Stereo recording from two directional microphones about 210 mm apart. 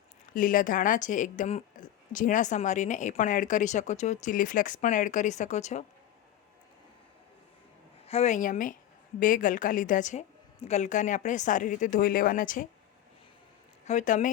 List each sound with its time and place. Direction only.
0.3 s a woman's voice: 40° left (ahead or behind)
8.0 s a woman's voice: 30° left (ahead or behind)
13.8 s a woman's voice: 35° left (ahead or behind)